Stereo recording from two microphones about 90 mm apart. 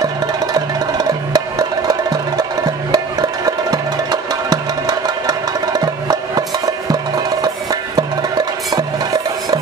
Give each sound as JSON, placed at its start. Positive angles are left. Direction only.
{"t": 0.9, "sound": "music", "side_deg": -45}
{"t": 7.4, "sound": "music", "side_deg": -45}